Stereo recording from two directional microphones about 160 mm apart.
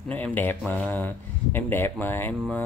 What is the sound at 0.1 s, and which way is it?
Speech, 10° left (ahead or behind).